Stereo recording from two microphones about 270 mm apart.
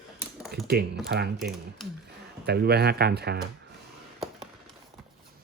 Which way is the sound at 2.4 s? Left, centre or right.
Right.